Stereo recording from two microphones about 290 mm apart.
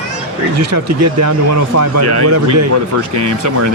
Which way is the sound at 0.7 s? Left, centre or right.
Right.